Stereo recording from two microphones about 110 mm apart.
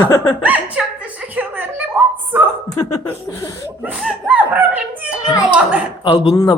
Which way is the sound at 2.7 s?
25° left (ahead or behind).